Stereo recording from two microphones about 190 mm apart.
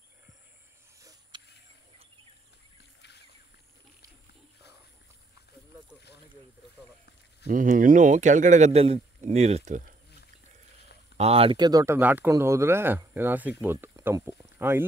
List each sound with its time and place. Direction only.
0.9 s a sound: 15° right (ahead or behind)
3.0 s boat: 60° left (ahead or behind)
7.4 s a man's voice: 45° right (ahead or behind)
11.1 s speech: 30° right (ahead or behind); by 14.9 s 15° right (ahead or behind)